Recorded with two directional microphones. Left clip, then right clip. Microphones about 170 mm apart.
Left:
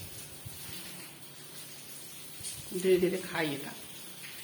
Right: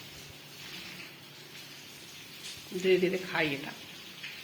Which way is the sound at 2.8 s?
15° left (ahead or behind).